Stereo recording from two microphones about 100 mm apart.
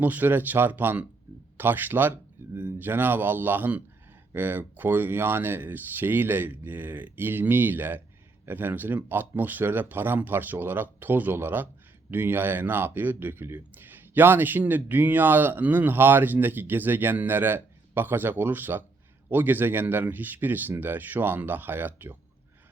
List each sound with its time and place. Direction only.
0.0 s speech: 15° right (ahead or behind)